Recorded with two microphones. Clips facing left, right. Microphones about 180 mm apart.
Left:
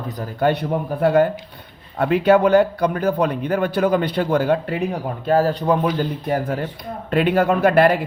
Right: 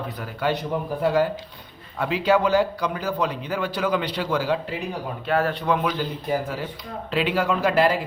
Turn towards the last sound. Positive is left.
turn(degrees=60)  # may be behind; listen again after turning